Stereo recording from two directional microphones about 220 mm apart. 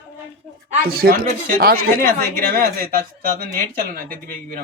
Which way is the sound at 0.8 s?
45° right (ahead or behind).